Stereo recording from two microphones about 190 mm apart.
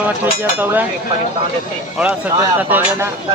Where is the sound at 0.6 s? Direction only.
10° right (ahead or behind).